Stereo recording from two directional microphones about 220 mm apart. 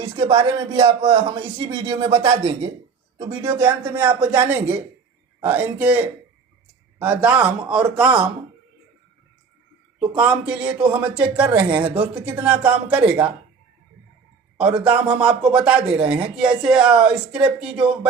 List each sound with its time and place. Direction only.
0.0 s speech: 25° right (ahead or behind)
3.6 s speech: 10° right (ahead or behind)
10.2 s speech: 5° right (ahead or behind)
11.8 s speech: 25° right (ahead or behind)
12.2 s speech: 5° right (ahead or behind)
14.6 s speech: 5° right (ahead or behind)